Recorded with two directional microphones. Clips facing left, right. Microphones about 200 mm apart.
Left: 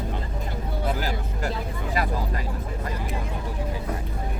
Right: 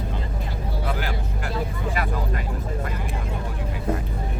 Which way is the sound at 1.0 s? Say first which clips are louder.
Left 1 dB; 40° left (ahead or behind).